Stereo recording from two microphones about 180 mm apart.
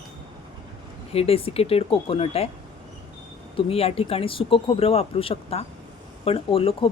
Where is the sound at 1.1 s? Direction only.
30° left (ahead or behind).